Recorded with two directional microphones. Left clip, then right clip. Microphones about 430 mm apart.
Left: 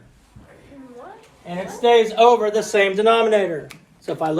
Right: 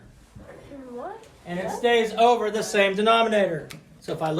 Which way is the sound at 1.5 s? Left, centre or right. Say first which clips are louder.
Left 5 dB; centre.